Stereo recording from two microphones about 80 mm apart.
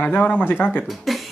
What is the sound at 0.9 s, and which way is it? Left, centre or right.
Speech, centre.